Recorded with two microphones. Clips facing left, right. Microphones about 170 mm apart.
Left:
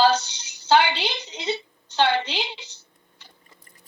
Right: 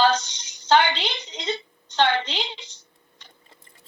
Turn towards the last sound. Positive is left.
turn(degrees=-25)  # may be behind; listen again after turning